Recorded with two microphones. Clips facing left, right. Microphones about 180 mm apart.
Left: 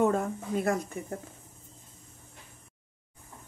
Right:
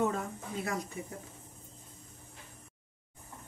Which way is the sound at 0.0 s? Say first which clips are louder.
Left 6 dB; 50° left (ahead or behind).